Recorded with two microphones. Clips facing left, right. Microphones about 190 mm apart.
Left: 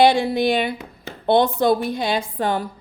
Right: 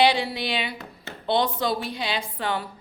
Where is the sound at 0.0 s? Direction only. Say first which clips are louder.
Left 6 dB; 45° left (ahead or behind).